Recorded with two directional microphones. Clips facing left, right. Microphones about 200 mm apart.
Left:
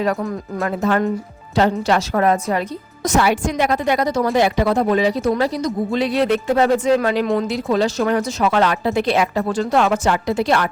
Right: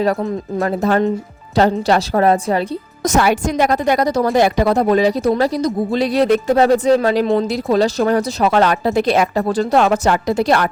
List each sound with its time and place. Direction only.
0.6 s speech: 35° right (ahead or behind)